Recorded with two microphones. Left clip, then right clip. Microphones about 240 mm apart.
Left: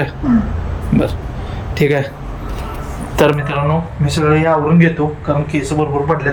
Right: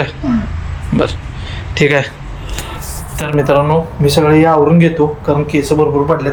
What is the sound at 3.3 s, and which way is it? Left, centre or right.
Speech, centre.